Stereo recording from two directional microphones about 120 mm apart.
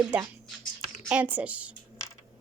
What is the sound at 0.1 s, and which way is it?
A child's voice, 15° right (ahead or behind).